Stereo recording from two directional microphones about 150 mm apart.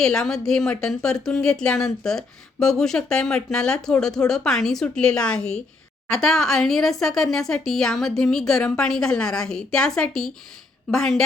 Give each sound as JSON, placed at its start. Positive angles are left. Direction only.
{"t": 0.0, "sound": "a woman's voice", "side_deg": 5}